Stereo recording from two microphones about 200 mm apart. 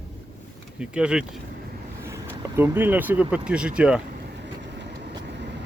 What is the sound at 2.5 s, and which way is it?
Speech, 10° right (ahead or behind).